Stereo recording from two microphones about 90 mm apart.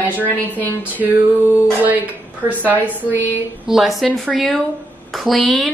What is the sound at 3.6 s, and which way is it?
Speech, 5° right (ahead or behind).